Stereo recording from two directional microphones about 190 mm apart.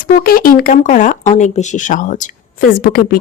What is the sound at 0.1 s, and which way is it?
Speech, 50° left (ahead or behind).